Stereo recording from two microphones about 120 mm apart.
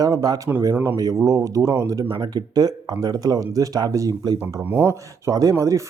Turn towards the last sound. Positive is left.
turn(degrees=-25)  # may be behind; listen again after turning